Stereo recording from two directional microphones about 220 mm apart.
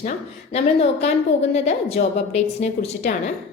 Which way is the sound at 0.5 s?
30° left (ahead or behind).